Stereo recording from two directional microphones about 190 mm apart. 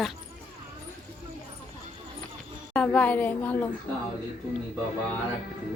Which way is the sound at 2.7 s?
5° left (ahead or behind).